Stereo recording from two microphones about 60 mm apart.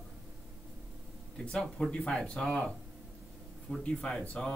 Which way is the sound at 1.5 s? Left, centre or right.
Centre.